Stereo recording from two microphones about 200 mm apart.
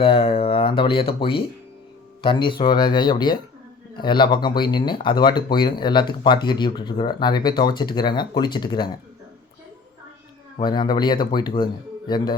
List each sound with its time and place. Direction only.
0.0 s speech: 25° left (ahead or behind)
10.6 s speech: 20° left (ahead or behind)